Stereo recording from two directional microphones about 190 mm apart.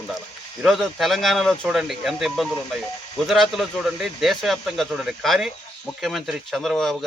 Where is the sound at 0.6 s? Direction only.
Centre (ahead or behind).